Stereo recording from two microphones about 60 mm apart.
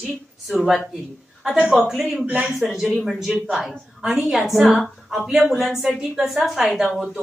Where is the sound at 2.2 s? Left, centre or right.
Right.